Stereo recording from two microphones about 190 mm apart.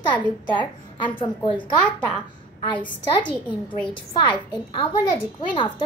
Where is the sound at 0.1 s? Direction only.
25° left (ahead or behind).